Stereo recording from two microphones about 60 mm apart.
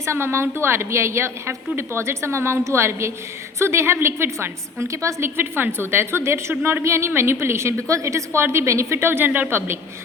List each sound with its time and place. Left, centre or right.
0.0 s a woman's voice: right
5.2 s a woman's voice: right